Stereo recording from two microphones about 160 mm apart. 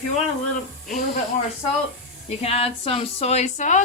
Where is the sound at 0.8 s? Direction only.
60° left (ahead or behind).